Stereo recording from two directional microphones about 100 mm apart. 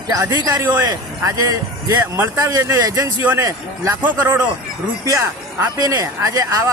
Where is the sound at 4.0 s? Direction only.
15° right (ahead or behind).